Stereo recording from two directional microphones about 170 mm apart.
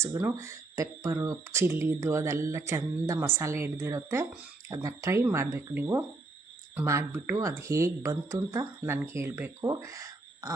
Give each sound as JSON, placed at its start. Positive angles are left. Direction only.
{"t": 0.2, "sound": "speech", "side_deg": -10}